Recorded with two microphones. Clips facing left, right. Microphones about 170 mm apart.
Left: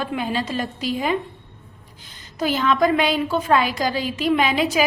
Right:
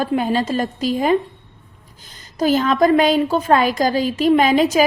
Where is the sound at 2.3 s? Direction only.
40° right (ahead or behind).